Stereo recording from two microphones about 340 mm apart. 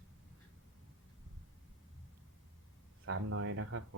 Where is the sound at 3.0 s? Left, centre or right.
Right.